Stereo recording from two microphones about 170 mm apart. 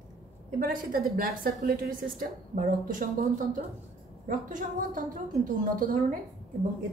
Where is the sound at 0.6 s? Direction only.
55° right (ahead or behind).